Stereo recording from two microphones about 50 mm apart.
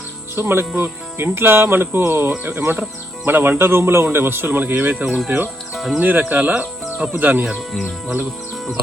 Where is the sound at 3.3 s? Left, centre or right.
Right.